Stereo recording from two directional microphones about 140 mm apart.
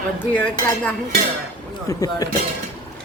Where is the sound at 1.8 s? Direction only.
25° left (ahead or behind).